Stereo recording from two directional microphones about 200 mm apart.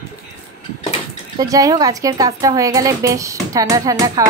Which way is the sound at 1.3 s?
15° right (ahead or behind).